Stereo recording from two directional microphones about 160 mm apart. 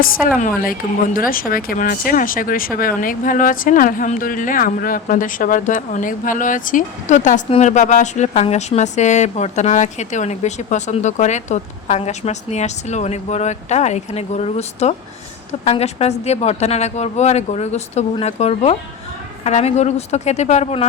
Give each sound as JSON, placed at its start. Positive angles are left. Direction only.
{"t": 0.3, "sound": "speech", "side_deg": 60}